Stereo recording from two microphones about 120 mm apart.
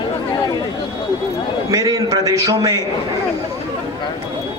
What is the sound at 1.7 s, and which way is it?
A man's voice, 30° right (ahead or behind).